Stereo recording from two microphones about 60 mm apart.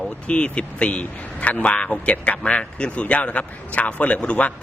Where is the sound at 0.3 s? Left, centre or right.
Centre.